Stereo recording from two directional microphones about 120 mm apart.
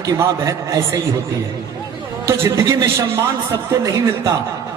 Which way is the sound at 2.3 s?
25° right (ahead or behind).